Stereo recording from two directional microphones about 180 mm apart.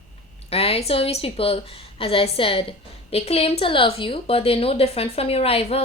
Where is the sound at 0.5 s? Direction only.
35° left (ahead or behind).